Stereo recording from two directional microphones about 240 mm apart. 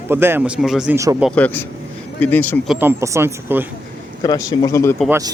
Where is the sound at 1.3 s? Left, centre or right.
Centre.